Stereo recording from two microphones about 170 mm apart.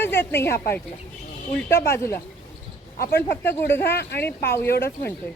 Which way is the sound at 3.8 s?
70° left (ahead or behind).